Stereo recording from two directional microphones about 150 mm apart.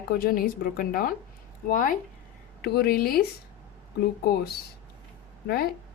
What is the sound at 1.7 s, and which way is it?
Speech, 65° left (ahead or behind).